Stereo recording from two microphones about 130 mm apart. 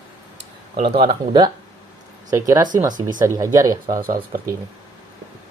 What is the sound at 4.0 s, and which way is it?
Speech, 90° right.